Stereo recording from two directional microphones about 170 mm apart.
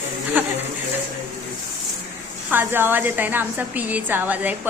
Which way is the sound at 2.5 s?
10° right (ahead or behind).